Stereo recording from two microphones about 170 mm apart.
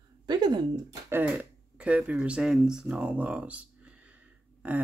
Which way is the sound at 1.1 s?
5° right (ahead or behind).